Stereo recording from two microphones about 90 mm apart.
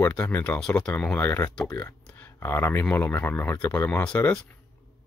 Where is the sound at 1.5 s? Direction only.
10° left (ahead or behind).